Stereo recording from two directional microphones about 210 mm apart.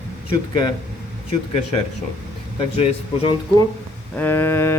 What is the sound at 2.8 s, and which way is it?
Speech, 30° left (ahead or behind).